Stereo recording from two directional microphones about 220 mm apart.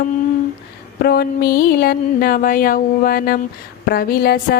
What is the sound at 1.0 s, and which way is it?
A woman's voice, 45° left (ahead or behind).